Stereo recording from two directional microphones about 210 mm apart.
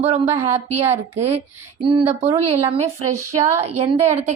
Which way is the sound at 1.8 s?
25° right (ahead or behind).